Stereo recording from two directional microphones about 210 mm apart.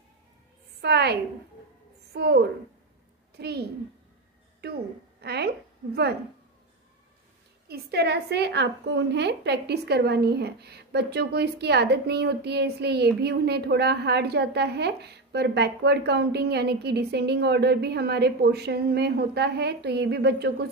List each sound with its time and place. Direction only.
0.7 s a woman's voice: 50° right (ahead or behind)
2.1 s a woman's voice: 50° right (ahead or behind)
7.6 s a woman's voice: 50° right (ahead or behind)